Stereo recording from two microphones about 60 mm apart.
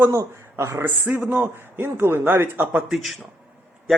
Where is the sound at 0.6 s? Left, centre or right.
Right.